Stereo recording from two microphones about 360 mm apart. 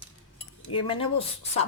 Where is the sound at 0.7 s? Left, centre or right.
Centre.